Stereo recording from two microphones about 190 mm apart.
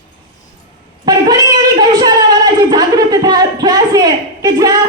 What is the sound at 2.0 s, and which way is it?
A man's voice, 20° right (ahead or behind).